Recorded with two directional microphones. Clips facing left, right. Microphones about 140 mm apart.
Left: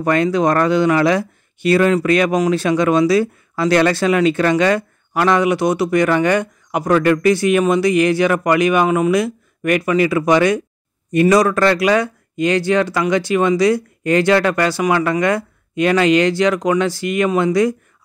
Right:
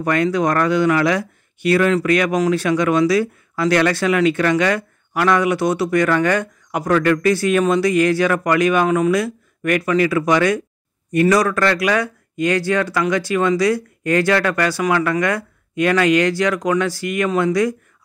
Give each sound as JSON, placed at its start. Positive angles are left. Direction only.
{"t": 0.0, "sound": "speech", "side_deg": 25}